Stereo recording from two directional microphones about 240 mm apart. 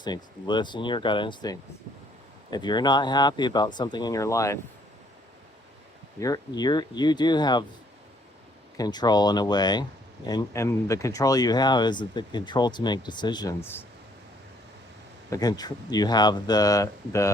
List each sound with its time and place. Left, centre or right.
0.0 s speech: centre
6.1 s speech: centre
8.8 s speech: centre
15.3 s speech: centre